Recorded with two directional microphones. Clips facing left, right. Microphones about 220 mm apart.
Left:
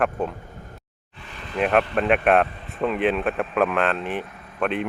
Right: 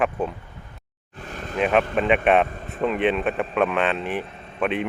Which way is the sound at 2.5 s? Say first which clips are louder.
Right 4 dB; 45° right (ahead or behind).